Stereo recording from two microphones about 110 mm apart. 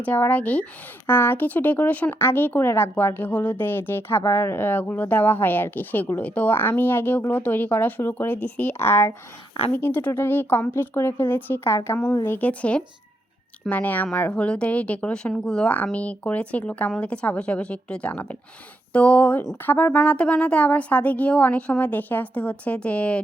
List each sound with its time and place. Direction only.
0.0 s a woman's voice: 15° left (ahead or behind)
12.4 s a woman's voice: 10° left (ahead or behind)